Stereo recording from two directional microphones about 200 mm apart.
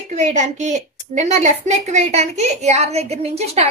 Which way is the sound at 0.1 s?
35° right (ahead or behind).